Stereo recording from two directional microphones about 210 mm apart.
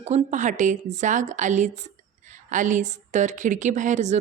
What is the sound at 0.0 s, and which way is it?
A woman's voice, 35° right (ahead or behind).